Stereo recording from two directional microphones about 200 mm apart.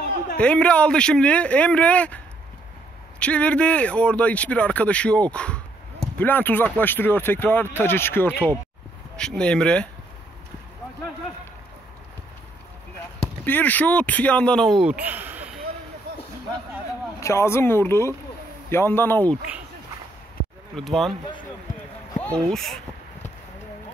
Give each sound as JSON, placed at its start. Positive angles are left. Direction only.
{"t": 0.4, "sound": "speech", "side_deg": 5}
{"t": 13.2, "sound": "speech", "side_deg": 10}
{"t": 17.2, "sound": "speech", "side_deg": 15}
{"t": 20.7, "sound": "speech", "side_deg": 0}
{"t": 22.2, "sound": "speech", "side_deg": 5}